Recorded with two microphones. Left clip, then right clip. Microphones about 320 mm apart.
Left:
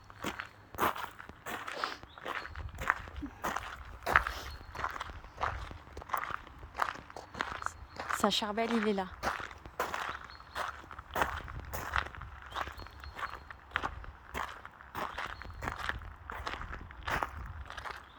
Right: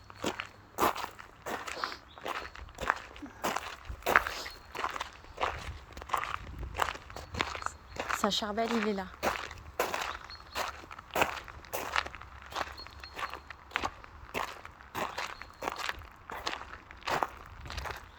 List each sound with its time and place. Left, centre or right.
0.2 s biting: right
2.2 s walk: right
3.4 s a sound: right
4.7 s walk: right
6.1 s biting: right
8.2 s speech: centre
9.2 s a sound: right
13.1 s walk: right
14.3 s a sound: right